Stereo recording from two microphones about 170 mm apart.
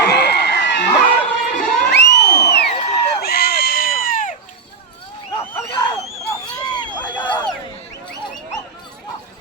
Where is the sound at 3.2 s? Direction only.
65° left (ahead or behind); by 4.4 s 50° left (ahead or behind).